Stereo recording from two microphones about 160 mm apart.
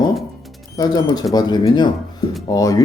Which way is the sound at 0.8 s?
25° left (ahead or behind).